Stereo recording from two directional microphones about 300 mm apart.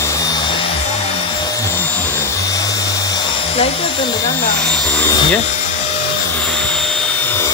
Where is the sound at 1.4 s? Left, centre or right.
Centre.